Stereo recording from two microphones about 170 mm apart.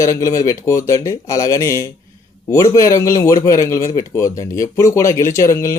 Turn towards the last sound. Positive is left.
turn(degrees=15)  # may be behind; listen again after turning